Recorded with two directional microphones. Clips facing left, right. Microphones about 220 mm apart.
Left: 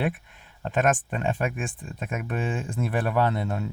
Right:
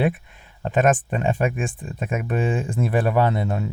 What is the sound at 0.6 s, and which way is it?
Speech, 5° right (ahead or behind).